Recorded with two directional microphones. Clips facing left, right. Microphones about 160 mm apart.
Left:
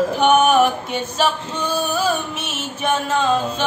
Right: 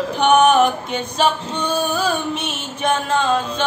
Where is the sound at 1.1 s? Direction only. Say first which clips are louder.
Right 3 dB; 5° left (ahead or behind).